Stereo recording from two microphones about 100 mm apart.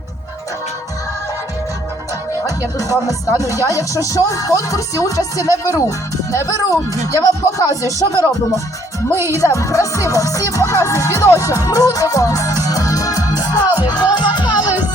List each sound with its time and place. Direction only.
3.1 s music: 35° left (ahead or behind)
9.1 s speech: 25° right (ahead or behind)
9.4 s music: 30° left (ahead or behind); by 14.7 s 50° left (ahead or behind)